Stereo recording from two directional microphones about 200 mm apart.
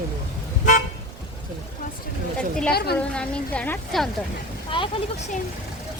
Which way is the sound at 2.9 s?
5° left (ahead or behind).